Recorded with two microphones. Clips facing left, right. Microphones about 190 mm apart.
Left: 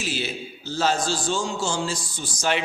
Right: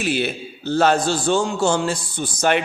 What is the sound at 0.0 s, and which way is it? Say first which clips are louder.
A man's voice: right 7 dB; 60° right (ahead or behind).